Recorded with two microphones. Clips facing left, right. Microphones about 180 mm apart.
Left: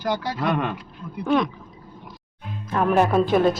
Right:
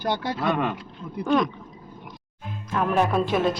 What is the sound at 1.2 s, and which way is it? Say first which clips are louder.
Speech: left 1 dB; centre (ahead or behind).